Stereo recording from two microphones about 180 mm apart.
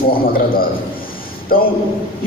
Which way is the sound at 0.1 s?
55° left (ahead or behind).